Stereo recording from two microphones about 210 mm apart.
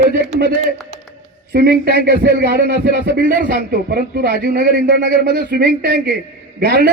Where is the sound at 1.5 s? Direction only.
50° right (ahead or behind).